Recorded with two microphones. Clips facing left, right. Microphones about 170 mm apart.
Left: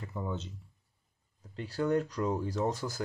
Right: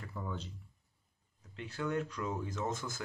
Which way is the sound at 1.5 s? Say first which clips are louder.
Left 7 dB; 35° left (ahead or behind).